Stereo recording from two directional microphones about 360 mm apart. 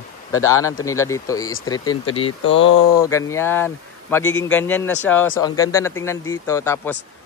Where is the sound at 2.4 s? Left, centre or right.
Left.